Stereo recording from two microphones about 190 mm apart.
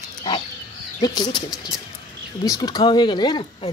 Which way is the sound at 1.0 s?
20° left (ahead or behind).